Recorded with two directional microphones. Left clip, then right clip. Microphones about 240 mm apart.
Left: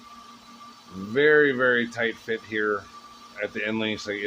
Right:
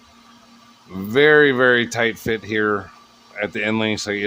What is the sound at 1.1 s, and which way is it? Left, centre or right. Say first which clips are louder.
Speech: right 6 dB; right.